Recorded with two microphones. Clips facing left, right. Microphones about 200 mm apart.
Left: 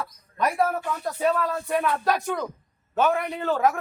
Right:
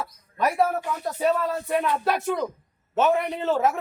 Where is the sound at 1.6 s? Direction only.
20° right (ahead or behind).